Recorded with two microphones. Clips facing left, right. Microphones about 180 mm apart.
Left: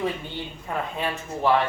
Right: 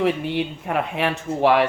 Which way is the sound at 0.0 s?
75° right (ahead or behind).